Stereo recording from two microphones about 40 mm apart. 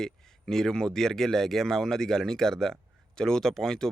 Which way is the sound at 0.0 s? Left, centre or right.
Centre.